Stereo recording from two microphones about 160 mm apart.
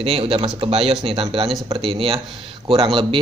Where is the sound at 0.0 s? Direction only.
35° right (ahead or behind).